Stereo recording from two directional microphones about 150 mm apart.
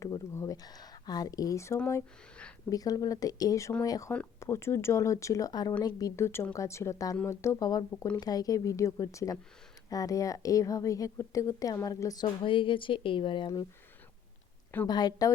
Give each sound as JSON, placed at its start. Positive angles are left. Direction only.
{"t": 0.0, "sound": "a sound", "side_deg": 20}
{"t": 2.6, "sound": "a woman's voice", "side_deg": 25}
{"t": 4.1, "sound": "a woman's voice", "side_deg": 15}
{"t": 14.8, "sound": "a woman's voice", "side_deg": 25}